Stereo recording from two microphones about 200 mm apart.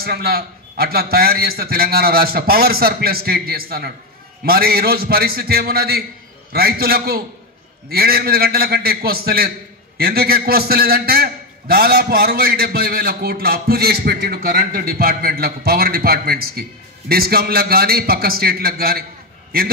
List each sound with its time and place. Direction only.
0.0 s a man's voice: 50° right (ahead or behind)